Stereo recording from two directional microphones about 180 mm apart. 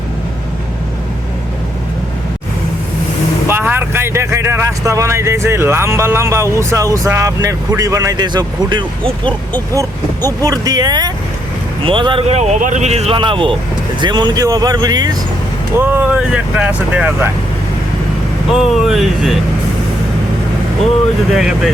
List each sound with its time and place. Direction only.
3.4 s speech: 10° right (ahead or behind)
15.8 s speech: 10° right (ahead or behind)
18.5 s speech: centre (ahead or behind)
21.3 s speech: 5° right (ahead or behind)